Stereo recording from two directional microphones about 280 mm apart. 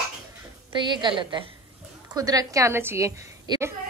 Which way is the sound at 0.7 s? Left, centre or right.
Centre.